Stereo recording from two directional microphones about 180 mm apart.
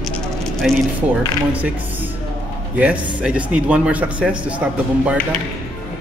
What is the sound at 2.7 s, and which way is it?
Speech, 10° right (ahead or behind).